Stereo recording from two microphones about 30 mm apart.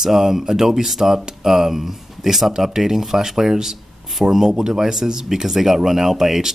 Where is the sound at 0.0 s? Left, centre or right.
Centre.